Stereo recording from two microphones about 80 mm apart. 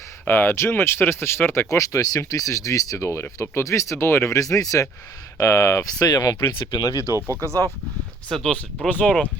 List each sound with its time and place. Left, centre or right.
0.3 s speech: left
1.7 s speech: left
7.4 s speech: right
8.3 s speech: centre
8.9 s speech: centre